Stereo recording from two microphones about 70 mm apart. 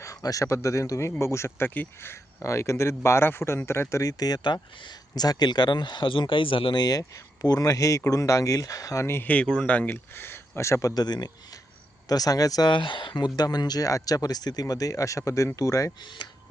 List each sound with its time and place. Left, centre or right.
0.2 s speech: left
1.5 s speech: left
4.0 s speech: left
6.7 s speech: left
9.2 s speech: centre; by 10.9 s left
10.9 s speech: left
12.0 s speech: left
13.1 s speech: left
16.0 s speech: left